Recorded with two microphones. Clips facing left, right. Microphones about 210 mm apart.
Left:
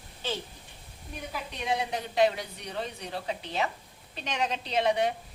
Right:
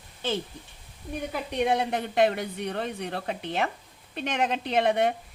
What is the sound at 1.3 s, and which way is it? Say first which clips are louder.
A woman's voice: right 6 dB; 60° right (ahead or behind).